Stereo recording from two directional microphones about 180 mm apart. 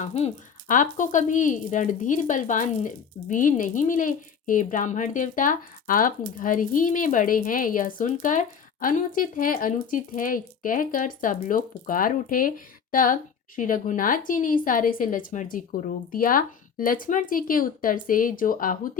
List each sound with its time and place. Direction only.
0.0 s speech: 35° left (ahead or behind)